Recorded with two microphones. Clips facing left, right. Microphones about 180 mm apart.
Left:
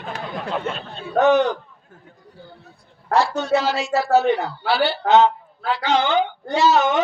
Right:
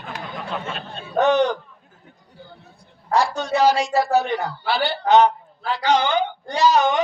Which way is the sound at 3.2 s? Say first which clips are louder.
Even; 15° right (ahead or behind).